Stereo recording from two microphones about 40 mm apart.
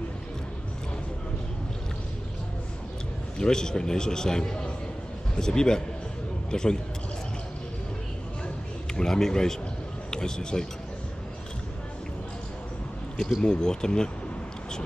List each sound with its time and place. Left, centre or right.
3.3 s a man's voice: centre
8.9 s a man's voice: centre
13.4 s speech: centre